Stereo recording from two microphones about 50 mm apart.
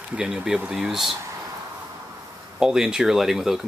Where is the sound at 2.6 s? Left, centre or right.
Centre.